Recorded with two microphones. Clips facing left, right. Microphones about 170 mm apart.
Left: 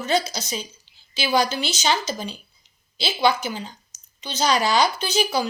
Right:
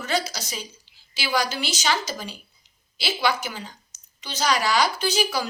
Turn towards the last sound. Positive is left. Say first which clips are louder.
# left 2 dB
turn(degrees=25)  # may be behind; listen again after turning